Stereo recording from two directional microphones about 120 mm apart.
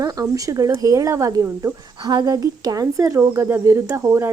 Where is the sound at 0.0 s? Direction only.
30° right (ahead or behind).